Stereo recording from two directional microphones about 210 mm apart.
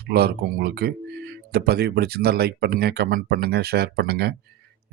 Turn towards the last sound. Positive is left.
turn(degrees=-50)  # may be behind; listen again after turning